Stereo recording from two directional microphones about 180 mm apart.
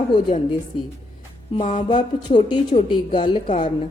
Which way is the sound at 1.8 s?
25° left (ahead or behind).